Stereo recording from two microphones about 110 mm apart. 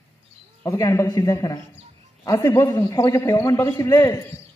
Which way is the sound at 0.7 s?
25° left (ahead or behind).